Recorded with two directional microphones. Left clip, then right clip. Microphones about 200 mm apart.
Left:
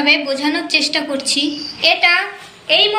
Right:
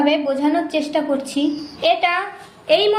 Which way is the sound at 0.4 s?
40° right (ahead or behind).